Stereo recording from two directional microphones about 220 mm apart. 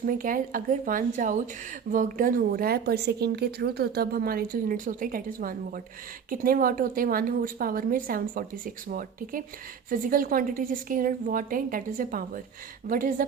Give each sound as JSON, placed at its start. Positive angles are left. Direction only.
{"t": 0.0, "sound": "a woman's voice", "side_deg": -40}